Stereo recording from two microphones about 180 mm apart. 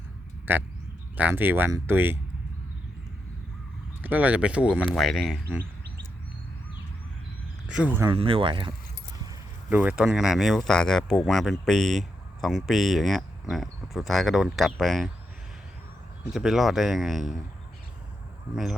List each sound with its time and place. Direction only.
0.5 s speech: 10° right (ahead or behind)
4.0 s speech: 10° right (ahead or behind)
7.7 s speech: 5° right (ahead or behind)
8.0 s speech: 30° right (ahead or behind)
9.6 s speech: 10° right (ahead or behind)
16.3 s speech: centre (ahead or behind)
18.5 s speech: centre (ahead or behind)